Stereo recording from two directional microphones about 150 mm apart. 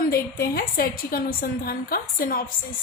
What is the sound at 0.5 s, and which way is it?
A woman's voice, 85° left.